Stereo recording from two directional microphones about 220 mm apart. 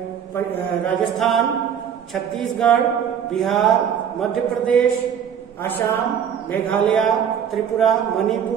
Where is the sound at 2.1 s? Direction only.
Centre (ahead or behind).